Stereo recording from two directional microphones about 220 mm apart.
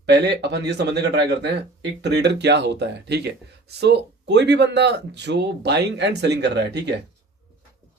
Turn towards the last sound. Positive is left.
turn(degrees=-50)  # may be behind; listen again after turning